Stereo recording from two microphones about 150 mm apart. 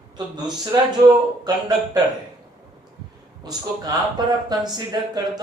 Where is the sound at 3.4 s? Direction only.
25° right (ahead or behind).